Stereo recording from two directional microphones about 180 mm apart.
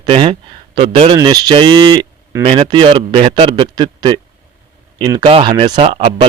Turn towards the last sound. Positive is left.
turn(degrees=-30)  # may be behind; listen again after turning